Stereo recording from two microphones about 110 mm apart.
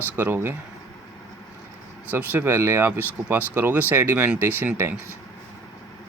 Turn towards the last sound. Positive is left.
turn(degrees=-20)  # may be behind; listen again after turning